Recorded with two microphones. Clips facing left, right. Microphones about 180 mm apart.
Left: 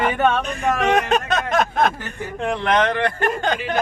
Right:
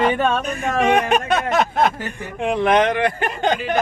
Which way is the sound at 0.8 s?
10° right (ahead or behind).